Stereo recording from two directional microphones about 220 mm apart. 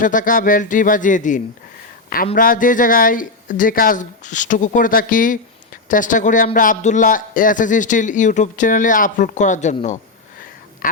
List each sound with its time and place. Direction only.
0.0 s speech: 35° left (ahead or behind)